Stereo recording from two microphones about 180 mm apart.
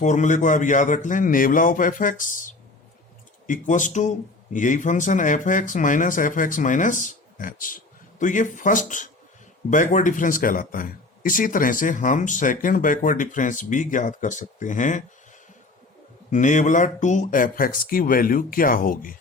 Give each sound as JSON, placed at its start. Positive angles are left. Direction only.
{"t": 0.0, "sound": "speech", "side_deg": 45}
{"t": 16.3, "sound": "speech", "side_deg": 45}